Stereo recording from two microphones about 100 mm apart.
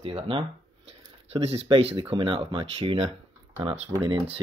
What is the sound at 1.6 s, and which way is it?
Speech, 65° right (ahead or behind).